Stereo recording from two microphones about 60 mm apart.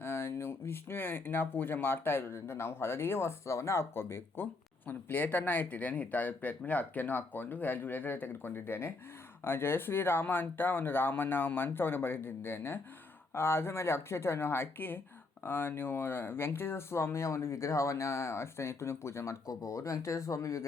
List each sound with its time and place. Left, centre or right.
0.0 s speech: left
4.9 s speech: left
19.5 s speech: left